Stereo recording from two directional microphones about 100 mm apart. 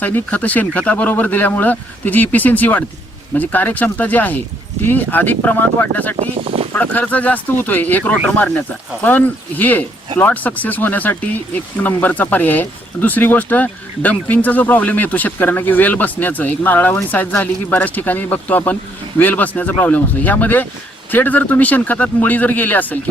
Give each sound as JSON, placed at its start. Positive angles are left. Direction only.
{"t": 0.0, "sound": "speech", "side_deg": 15}
{"t": 6.1, "sound": "speech", "side_deg": -75}
{"t": 6.7, "sound": "speech", "side_deg": 15}